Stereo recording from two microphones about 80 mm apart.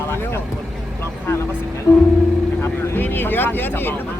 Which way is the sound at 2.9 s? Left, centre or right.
Left.